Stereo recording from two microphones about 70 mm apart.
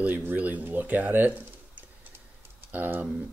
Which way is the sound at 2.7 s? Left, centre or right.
Right.